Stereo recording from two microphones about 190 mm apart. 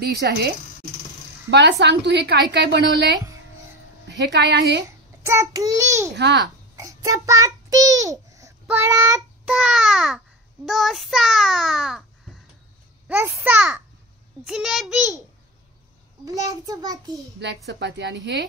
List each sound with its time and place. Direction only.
0.0 s a woman's voice: 55° right (ahead or behind)
5.2 s a child's voice: 15° right (ahead or behind)
6.1 s a woman's voice: 65° right (ahead or behind)
6.8 s child singing: 15° right (ahead or behind)
9.5 s babbling: 5° right (ahead or behind)
13.4 s a child's voice: 5° right (ahead or behind)
14.4 s babbling: centre (ahead or behind)
16.3 s a child's voice: 15° right (ahead or behind)
17.6 s a woman's voice: 65° right (ahead or behind)